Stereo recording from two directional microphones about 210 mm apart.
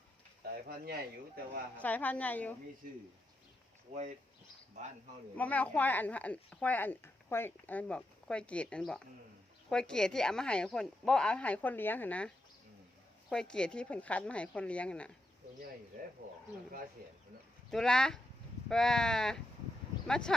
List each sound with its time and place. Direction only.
0.4 s speech: 45° right (ahead or behind)
1.8 s speech: 10° left (ahead or behind)
3.9 s speech: 35° right (ahead or behind)
5.4 s speech: 5° left (ahead or behind)
13.3 s speech: 5° left (ahead or behind)
17.0 s speech: 45° right (ahead or behind)
17.7 s speech: 5° left (ahead or behind)